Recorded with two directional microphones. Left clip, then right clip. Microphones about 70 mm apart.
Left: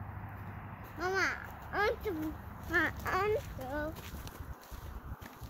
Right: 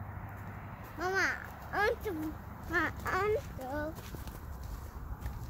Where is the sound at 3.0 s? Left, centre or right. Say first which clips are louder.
Even; left.